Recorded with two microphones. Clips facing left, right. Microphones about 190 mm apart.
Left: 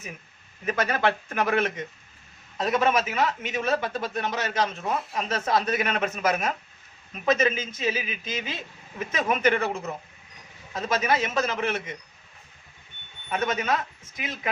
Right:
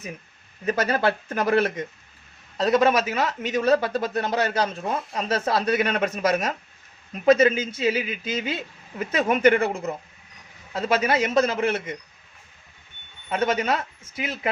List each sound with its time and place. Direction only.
0.6 s a man's voice: 35° right (ahead or behind)
10.8 s a man's voice: 30° right (ahead or behind)
13.3 s a man's voice: 30° right (ahead or behind)